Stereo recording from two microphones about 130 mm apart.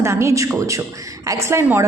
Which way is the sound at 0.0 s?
20° right (ahead or behind).